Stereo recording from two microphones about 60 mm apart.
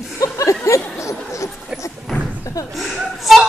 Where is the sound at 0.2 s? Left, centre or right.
Left.